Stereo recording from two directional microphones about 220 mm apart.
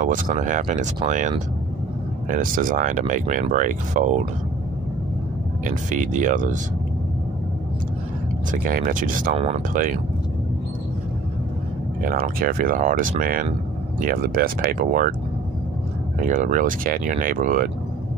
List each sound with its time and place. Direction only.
0.0 s speech: 35° right (ahead or behind)
5.6 s speech: 35° right (ahead or behind)
8.5 s speech: 40° right (ahead or behind)
12.0 s speech: 40° right (ahead or behind)
16.2 s speech: 35° right (ahead or behind)